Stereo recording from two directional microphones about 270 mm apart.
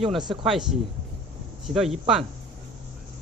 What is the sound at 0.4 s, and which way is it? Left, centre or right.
Speech, centre.